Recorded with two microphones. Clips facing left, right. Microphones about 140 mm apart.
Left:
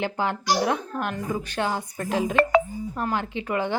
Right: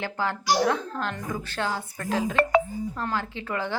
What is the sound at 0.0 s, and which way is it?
A woman's voice, 20° left (ahead or behind).